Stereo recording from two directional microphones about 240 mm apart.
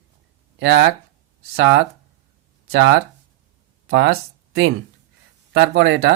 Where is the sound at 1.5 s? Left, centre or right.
Right.